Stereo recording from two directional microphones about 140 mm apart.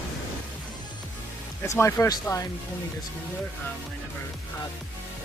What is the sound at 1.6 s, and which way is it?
Speech, 20° left (ahead or behind).